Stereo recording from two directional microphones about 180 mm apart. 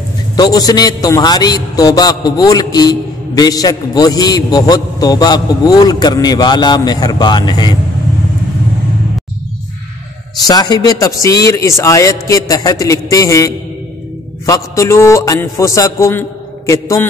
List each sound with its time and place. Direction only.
0.4 s a man's voice: 20° left (ahead or behind)
10.4 s a man's voice: 20° left (ahead or behind)